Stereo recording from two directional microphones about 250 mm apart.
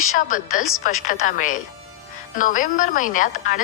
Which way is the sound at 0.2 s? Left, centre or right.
Left.